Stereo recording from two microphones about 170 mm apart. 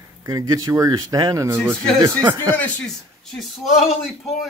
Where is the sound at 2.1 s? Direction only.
20° right (ahead or behind).